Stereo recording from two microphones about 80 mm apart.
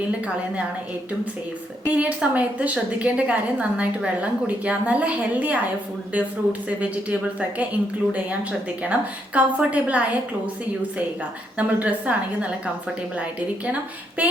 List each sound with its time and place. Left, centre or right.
1.8 s a woman's voice: centre
8.8 s a woman's voice: centre
11.5 s a woman's voice: centre
14.2 s a sound: centre